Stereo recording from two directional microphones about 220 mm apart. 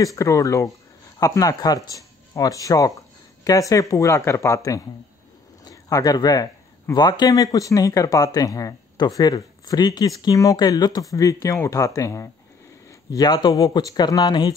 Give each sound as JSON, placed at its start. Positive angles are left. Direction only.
{"t": 0.0, "sound": "speech", "side_deg": 15}
{"t": 5.7, "sound": "speech", "side_deg": 15}